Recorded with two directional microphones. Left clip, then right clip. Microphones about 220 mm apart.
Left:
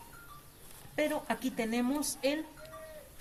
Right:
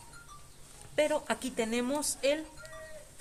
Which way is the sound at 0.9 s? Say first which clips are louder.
Right 3 dB; 45° right (ahead or behind).